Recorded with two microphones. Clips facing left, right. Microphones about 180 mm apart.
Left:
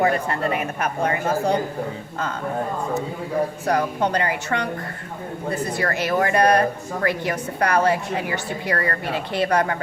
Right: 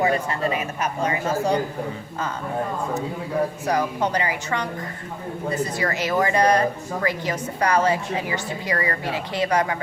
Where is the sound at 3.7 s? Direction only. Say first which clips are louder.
Left 3 dB; 60° left (ahead or behind).